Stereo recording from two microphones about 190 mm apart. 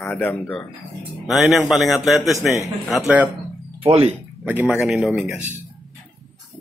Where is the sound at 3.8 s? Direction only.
35° right (ahead or behind).